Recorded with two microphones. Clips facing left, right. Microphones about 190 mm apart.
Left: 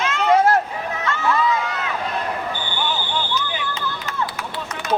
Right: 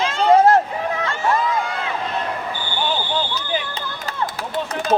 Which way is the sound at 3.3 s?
35° right (ahead or behind).